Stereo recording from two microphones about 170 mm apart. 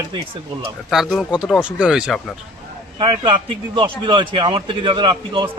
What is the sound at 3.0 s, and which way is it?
A man's voice, 30° right (ahead or behind).